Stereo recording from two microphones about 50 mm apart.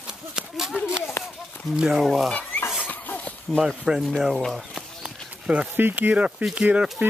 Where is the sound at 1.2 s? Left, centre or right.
Left.